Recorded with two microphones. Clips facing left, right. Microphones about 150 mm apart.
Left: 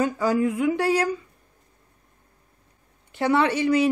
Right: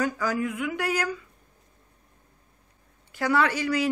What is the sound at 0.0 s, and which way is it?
A woman's voice, 25° left (ahead or behind).